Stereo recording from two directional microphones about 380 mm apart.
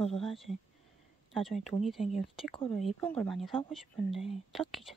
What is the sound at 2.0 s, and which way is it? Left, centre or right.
Speech, centre.